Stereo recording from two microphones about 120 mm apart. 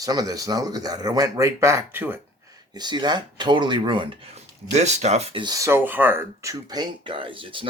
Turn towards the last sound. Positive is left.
turn(degrees=-45)  # may be behind; listen again after turning